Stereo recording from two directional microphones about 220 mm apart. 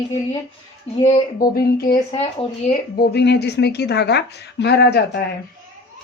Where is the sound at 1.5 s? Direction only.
45° left (ahead or behind).